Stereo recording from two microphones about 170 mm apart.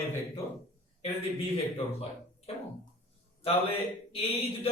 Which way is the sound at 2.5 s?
35° left (ahead or behind).